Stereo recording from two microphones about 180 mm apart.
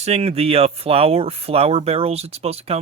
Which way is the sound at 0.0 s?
35° right (ahead or behind).